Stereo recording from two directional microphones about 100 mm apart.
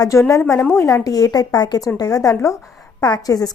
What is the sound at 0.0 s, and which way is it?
Speech, 30° left (ahead or behind).